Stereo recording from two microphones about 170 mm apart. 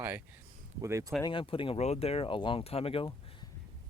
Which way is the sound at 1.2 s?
30° left (ahead or behind).